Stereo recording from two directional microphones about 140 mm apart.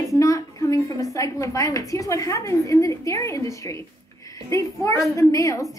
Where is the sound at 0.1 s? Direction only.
25° left (ahead or behind).